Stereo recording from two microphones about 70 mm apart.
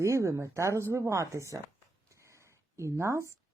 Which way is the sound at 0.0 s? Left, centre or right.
Right.